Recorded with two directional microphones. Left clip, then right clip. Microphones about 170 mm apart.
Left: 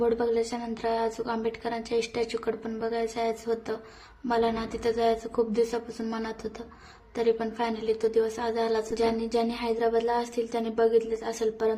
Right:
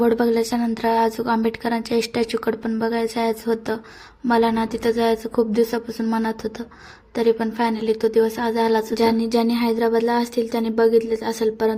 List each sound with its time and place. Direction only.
0.0 s a woman's voice: 40° right (ahead or behind)